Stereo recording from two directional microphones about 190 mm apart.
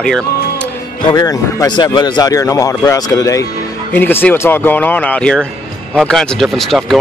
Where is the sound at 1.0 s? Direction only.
20° left (ahead or behind).